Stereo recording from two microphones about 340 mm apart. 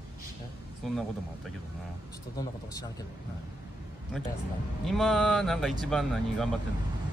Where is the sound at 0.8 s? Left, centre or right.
Centre.